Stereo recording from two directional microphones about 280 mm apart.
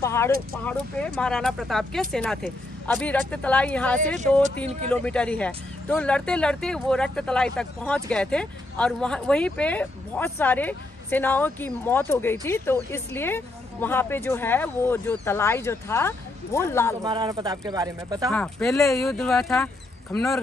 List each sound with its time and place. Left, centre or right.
0.0 s a woman's voice: centre
17.0 s speech: centre
18.3 s speech: centre